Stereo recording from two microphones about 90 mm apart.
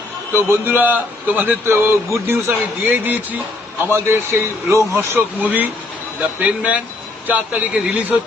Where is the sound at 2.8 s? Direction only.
20° right (ahead or behind).